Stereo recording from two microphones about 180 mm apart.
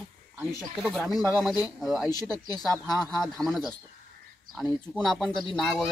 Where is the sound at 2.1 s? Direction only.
20° left (ahead or behind).